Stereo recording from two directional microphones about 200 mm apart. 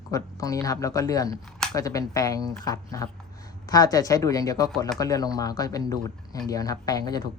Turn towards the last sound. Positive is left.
turn(degrees=20)  # may be behind; listen again after turning